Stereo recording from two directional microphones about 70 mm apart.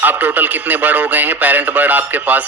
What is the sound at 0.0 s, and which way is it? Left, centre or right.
A man's voice, right.